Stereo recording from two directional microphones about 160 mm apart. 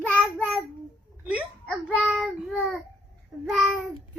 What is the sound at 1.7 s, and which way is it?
Child singing, 5° left (ahead or behind).